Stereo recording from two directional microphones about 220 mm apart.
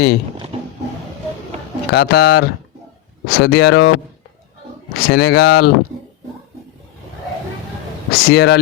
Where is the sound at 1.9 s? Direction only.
45° left (ahead or behind).